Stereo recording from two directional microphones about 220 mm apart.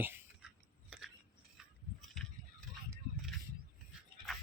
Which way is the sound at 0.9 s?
Centre (ahead or behind).